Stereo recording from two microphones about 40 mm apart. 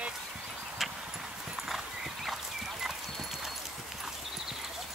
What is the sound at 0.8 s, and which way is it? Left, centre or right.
Clip-clop, centre.